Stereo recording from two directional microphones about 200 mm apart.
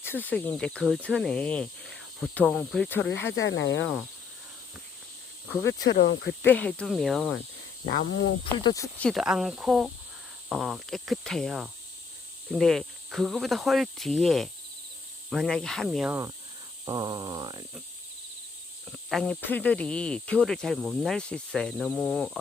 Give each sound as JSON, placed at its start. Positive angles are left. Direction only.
{"t": 0.0, "sound": "speech", "side_deg": 10}
{"t": 3.1, "sound": "speech", "side_deg": 65}
{"t": 5.6, "sound": "speech", "side_deg": 70}
{"t": 6.5, "sound": "speech", "side_deg": 5}
{"t": 7.9, "sound": "speech", "side_deg": 60}
{"t": 8.5, "sound": "speech", "side_deg": 20}
{"t": 9.0, "sound": "speech", "side_deg": 0}
{"t": 16.0, "sound": "speech", "side_deg": -15}
{"t": 18.9, "sound": "speech", "side_deg": 5}